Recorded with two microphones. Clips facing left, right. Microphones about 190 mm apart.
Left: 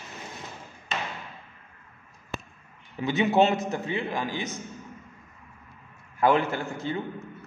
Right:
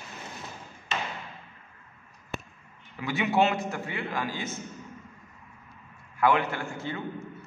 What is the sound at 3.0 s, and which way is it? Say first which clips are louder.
A man's voice: left 3 dB; 20° left (ahead or behind).